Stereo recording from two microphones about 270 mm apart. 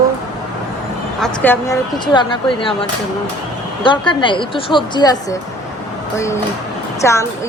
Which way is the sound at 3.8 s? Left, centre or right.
Centre.